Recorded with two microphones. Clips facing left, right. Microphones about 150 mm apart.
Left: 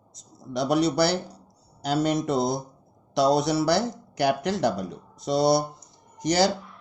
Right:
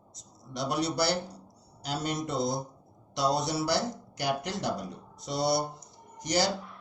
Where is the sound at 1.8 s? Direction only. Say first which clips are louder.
Left 9 dB; 90° left.